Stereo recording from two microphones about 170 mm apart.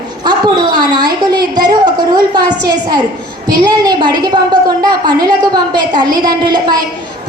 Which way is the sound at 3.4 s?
25° right (ahead or behind).